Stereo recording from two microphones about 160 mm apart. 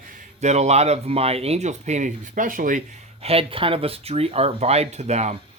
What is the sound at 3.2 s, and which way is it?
Speech, 35° right (ahead or behind).